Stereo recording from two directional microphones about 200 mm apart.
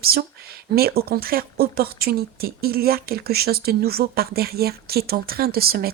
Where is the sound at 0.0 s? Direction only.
50° right (ahead or behind).